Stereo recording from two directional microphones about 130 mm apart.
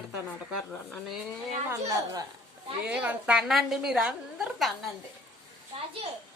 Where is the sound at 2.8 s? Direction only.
10° right (ahead or behind).